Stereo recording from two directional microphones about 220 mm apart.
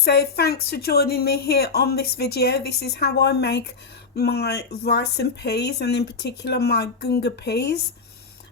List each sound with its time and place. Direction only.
0.0 s speech: 45° left (ahead or behind)